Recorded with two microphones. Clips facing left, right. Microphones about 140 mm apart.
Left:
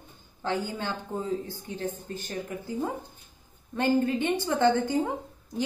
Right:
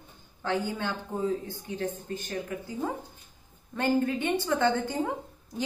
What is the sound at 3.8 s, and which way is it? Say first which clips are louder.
A woman's voice: left 2 dB; 20° left (ahead or behind).